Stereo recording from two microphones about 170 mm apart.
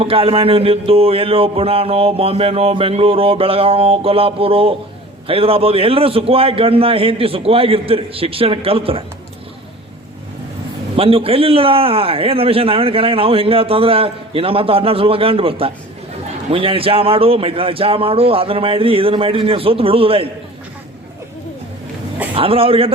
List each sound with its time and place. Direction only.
0.0 s a man's voice: 35° right (ahead or behind)
10.9 s a man's voice: 35° right (ahead or behind)
22.4 s a man's voice: 35° right (ahead or behind)